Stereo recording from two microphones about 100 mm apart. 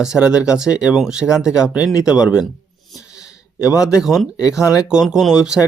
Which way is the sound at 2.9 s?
35° left (ahead or behind).